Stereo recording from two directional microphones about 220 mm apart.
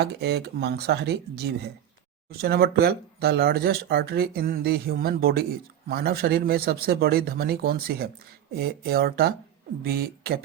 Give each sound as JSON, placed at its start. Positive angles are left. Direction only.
{"t": 0.0, "sound": "speech", "side_deg": -50}